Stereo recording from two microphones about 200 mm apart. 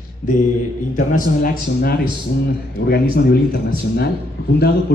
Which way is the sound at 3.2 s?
50° left (ahead or behind).